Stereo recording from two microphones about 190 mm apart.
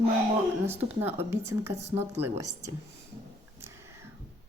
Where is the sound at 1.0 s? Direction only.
15° right (ahead or behind).